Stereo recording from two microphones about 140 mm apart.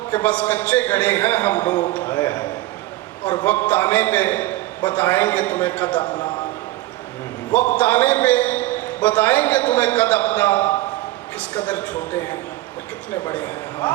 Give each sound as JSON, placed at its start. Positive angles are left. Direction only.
{"t": 0.1, "sound": "a man's voice", "side_deg": 10}
{"t": 3.4, "sound": "a man's voice", "side_deg": 10}
{"t": 6.0, "sound": "a man's voice", "side_deg": 35}
{"t": 7.5, "sound": "a man's voice", "side_deg": 10}